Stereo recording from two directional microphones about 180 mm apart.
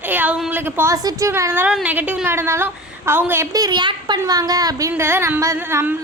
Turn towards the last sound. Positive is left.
turn(degrees=-15)  # may be behind; listen again after turning